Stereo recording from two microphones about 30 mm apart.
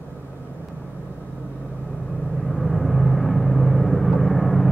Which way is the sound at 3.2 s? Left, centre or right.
Centre.